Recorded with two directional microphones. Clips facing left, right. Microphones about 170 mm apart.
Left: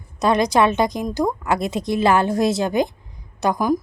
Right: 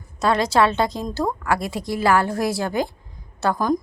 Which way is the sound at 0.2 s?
20° left (ahead or behind).